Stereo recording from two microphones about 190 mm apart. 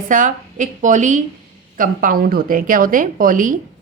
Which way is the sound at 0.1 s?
40° right (ahead or behind).